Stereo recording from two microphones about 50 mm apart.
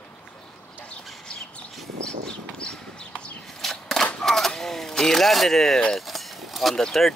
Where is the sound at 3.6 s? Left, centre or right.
Centre.